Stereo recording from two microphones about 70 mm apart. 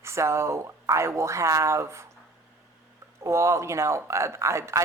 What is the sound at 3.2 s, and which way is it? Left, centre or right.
Speech, right.